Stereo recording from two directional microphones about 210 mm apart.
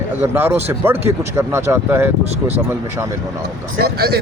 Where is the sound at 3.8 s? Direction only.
50° right (ahead or behind).